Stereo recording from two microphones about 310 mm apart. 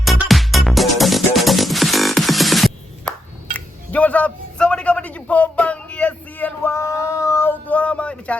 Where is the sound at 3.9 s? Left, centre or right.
Centre.